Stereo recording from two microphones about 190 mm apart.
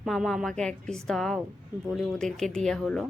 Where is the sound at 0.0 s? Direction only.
Centre (ahead or behind).